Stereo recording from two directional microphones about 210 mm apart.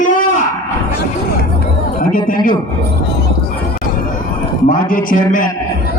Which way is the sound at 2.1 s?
40° left (ahead or behind).